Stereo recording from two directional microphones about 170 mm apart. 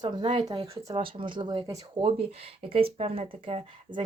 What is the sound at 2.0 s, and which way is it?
Speech, 35° right (ahead or behind).